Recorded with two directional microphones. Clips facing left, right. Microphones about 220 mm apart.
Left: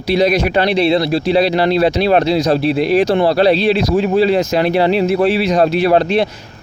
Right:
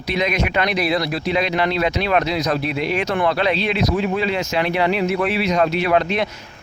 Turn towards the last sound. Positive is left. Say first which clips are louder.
# left 6 dB
turn(degrees=35)  # may be behind; listen again after turning